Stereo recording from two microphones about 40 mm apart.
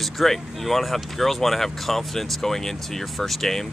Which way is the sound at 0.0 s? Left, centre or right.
Centre.